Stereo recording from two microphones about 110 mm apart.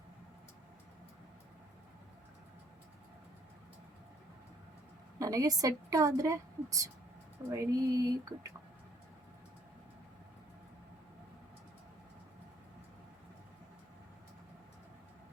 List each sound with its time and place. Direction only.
5.2 s a woman's voice: 30° right (ahead or behind)